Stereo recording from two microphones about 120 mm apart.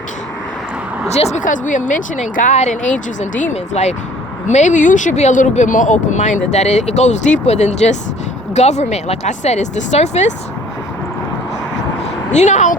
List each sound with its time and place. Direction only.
1.0 s speech: 65° left (ahead or behind)
3.2 s speech: 85° left; by 3.9 s 65° left (ahead or behind)
4.4 s speech: 80° left
12.3 s speech: 75° left (ahead or behind)